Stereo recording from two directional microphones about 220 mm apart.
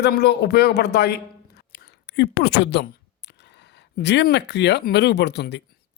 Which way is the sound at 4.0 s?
50° left (ahead or behind).